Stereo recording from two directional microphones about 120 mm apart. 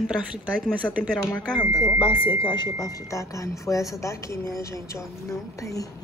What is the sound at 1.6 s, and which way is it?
Speech, 40° left (ahead or behind).